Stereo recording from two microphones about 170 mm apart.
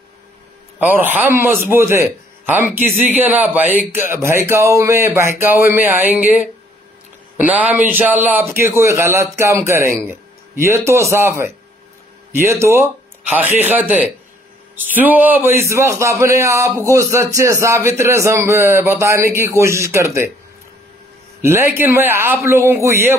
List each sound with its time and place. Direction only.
0.7 s a man's voice: 10° right (ahead or behind)
21.4 s a man's voice: 15° right (ahead or behind)